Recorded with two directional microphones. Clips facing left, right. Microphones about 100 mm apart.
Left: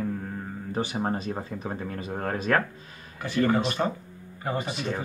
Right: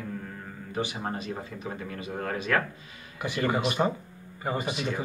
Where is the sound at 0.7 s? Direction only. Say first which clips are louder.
Left 3 dB; 35° left (ahead or behind).